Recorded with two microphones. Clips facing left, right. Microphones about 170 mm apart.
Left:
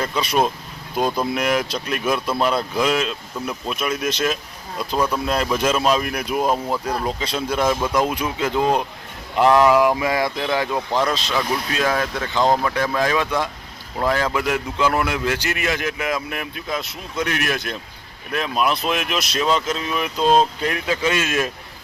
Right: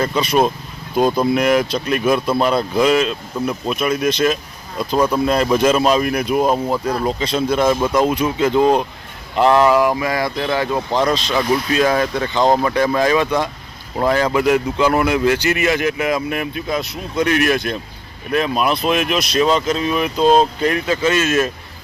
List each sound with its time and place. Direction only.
0.1 s speech: 5° right (ahead or behind)
4.9 s speech: 10° right (ahead or behind)
7.2 s speech: 10° left (ahead or behind)
10.4 s speech: 10° left (ahead or behind)